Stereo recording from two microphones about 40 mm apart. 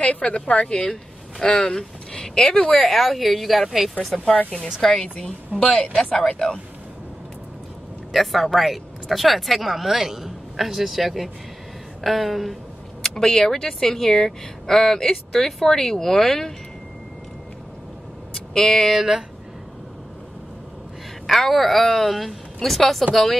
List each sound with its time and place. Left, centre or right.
0.0 s a woman's voice: left; by 3.9 s centre
4.8 s a woman's voice: centre
8.1 s a woman's voice: centre
13.0 s speech: centre
18.3 s vehicle: centre
18.9 s speech: centre
21.3 s a woman's voice: centre